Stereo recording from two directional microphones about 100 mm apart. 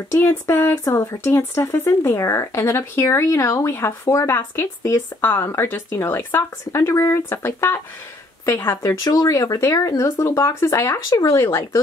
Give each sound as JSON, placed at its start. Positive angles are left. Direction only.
{"t": 0.1, "sound": "speech", "side_deg": 25}